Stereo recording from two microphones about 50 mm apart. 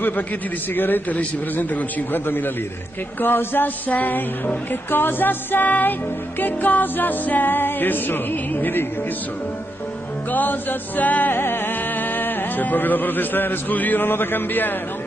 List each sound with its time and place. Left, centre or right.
0.7 s music: left
10.3 s music: left
11.3 s music: left